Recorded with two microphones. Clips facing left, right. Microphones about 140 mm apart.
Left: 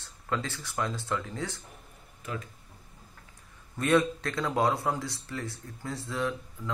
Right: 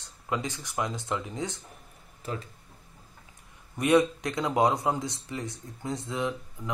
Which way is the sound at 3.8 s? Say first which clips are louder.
Right 2 dB; 15° right (ahead or behind).